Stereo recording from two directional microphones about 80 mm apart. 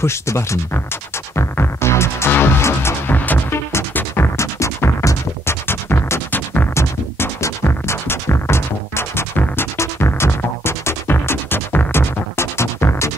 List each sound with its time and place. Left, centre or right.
0.0 s speech: left
1.3 s music: left